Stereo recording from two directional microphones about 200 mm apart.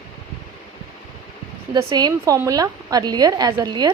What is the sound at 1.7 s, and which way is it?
A woman's voice, 20° right (ahead or behind).